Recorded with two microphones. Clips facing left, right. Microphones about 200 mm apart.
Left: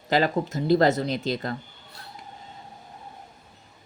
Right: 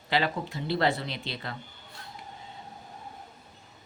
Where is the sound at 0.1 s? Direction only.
45° left (ahead or behind).